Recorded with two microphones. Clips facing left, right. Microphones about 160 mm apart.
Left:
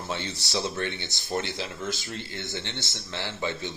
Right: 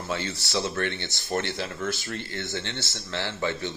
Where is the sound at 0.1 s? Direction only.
15° left (ahead or behind).